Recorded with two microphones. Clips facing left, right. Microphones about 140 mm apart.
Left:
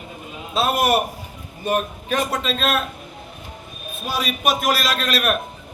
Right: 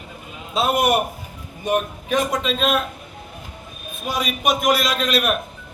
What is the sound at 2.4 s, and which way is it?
Speech, 15° right (ahead or behind).